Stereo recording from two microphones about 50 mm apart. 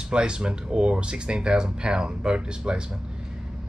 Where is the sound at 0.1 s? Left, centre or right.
Centre.